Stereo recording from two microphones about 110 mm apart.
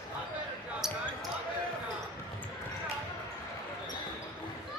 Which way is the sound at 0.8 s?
5° right (ahead or behind).